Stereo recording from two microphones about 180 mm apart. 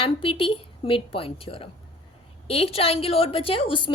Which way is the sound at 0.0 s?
30° left (ahead or behind).